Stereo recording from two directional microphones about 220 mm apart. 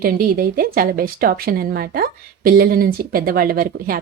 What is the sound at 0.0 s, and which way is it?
Speech, 40° right (ahead or behind).